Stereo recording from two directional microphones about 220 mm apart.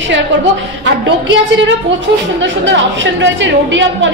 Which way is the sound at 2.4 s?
55° right (ahead or behind).